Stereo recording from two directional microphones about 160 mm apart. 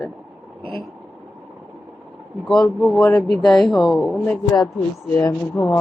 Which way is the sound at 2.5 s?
5° left (ahead or behind).